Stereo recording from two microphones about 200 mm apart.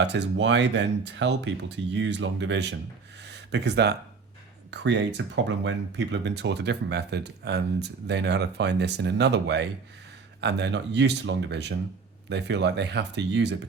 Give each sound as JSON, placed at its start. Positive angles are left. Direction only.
{"t": 0.0, "sound": "speech", "side_deg": -60}
{"t": 3.2, "sound": "a sound", "side_deg": -60}
{"t": 4.7, "sound": "speech", "side_deg": -60}